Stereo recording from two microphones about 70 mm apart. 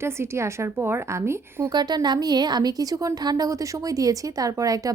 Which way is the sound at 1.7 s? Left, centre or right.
Right.